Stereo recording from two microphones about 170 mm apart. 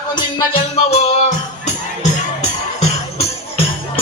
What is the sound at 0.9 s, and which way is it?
Music, 40° left (ahead or behind).